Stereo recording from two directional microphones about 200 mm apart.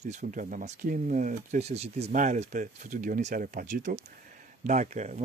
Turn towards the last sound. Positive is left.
turn(degrees=-35)  # may be behind; listen again after turning